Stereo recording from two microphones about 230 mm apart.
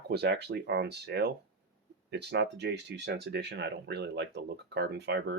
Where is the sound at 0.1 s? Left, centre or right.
Right.